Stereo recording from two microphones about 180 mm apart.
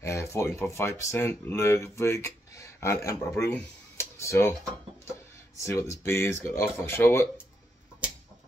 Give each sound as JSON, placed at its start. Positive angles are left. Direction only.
{"t": 0.0, "sound": "speech", "side_deg": 15}
{"t": 5.6, "sound": "speech", "side_deg": 15}